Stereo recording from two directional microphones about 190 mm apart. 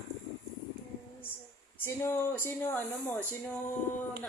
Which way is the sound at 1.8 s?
15° left (ahead or behind).